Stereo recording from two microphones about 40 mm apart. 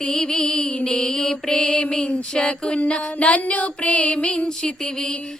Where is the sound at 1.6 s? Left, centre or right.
Left.